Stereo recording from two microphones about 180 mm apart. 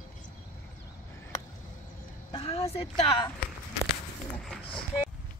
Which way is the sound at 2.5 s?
35° left (ahead or behind).